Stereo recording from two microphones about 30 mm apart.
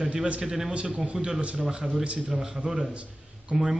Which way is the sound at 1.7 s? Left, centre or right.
Right.